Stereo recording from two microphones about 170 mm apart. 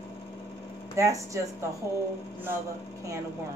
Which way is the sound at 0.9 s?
20° right (ahead or behind).